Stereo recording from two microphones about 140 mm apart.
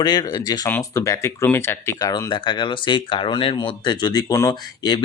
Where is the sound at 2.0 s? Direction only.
30° left (ahead or behind).